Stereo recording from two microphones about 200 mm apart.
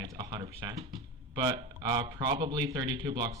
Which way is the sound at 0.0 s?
20° right (ahead or behind).